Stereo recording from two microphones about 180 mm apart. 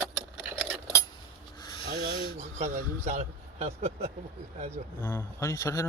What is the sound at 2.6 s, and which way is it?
A man's voice, 35° right (ahead or behind).